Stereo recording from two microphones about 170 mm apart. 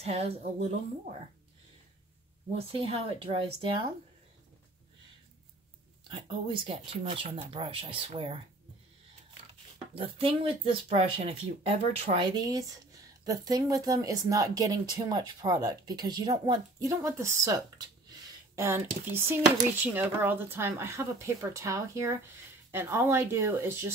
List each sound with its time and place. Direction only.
0.0 s speech: 40° right (ahead or behind)
2.5 s speech: 35° right (ahead or behind)
6.0 s speech: 30° right (ahead or behind)
9.9 s speech: 35° right (ahead or behind)
12.4 s speech: 20° right (ahead or behind)
18.6 s speech: 15° right (ahead or behind)